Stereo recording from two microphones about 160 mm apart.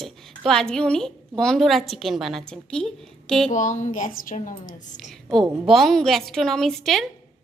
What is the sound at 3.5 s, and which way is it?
A woman's voice, 50° left (ahead or behind).